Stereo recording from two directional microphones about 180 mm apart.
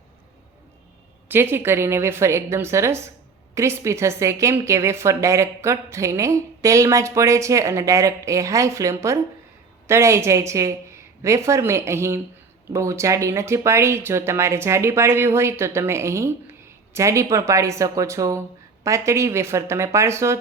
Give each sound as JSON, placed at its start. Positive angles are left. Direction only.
{"t": 1.3, "sound": "a woman's voice", "side_deg": -15}